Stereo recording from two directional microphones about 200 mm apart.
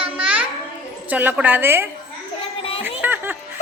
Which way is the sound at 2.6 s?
30° left (ahead or behind).